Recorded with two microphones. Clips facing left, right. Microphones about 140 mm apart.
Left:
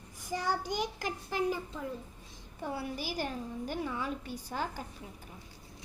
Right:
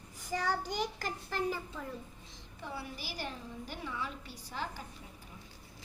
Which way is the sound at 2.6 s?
45° left (ahead or behind).